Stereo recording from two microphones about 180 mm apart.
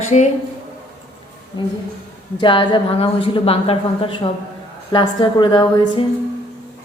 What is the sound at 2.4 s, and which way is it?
A woman's voice, 25° left (ahead or behind).